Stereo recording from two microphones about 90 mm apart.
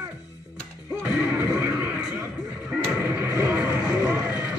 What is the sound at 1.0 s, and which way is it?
Music, 20° right (ahead or behind).